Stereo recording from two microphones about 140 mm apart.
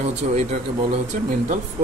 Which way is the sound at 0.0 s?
50° right (ahead or behind).